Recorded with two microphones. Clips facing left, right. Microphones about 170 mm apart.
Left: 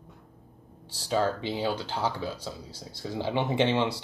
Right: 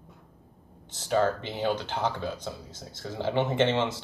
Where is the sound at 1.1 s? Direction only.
10° left (ahead or behind).